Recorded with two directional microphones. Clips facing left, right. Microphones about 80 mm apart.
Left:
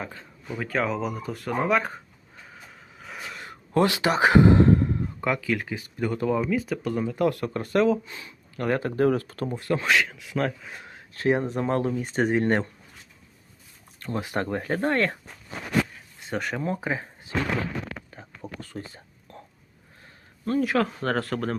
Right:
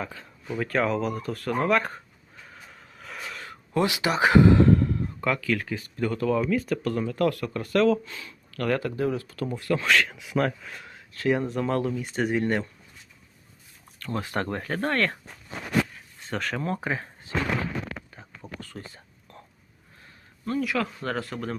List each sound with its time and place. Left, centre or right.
0.1 s speech: centre
3.0 s a sound: centre
3.8 s speech: left
6.4 s speech: centre
7.3 s speech: left
7.8 s speech: centre
9.0 s speech: left
9.5 s speech: left
10.3 s speech: centre
10.7 s speech: left
14.0 s speech: left
16.3 s speech: centre
18.6 s whispering: left
20.4 s speech: left